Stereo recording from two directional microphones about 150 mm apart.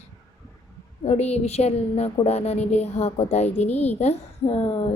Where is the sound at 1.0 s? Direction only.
45° left (ahead or behind).